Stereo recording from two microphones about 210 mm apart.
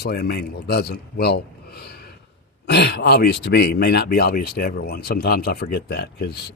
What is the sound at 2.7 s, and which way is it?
A man's voice, 50° left (ahead or behind).